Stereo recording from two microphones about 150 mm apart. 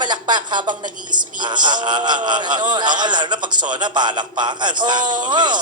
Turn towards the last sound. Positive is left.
turn(degrees=-30)  # may be behind; listen again after turning